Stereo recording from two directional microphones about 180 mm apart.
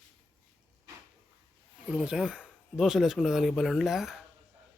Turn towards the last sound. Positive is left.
turn(degrees=0)  # may be behind; listen again after turning